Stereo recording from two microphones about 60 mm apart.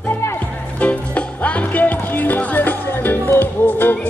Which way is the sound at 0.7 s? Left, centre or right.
Left.